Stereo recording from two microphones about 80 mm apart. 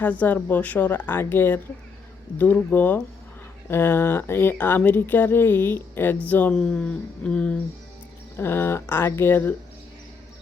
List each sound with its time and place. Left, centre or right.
0.0 s speech: centre
2.6 s speech: left
8.4 s speech: left